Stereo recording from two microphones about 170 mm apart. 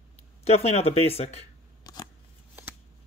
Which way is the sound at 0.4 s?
35° left (ahead or behind).